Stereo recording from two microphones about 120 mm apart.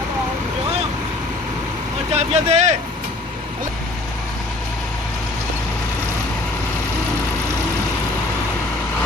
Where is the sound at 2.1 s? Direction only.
65° right (ahead or behind).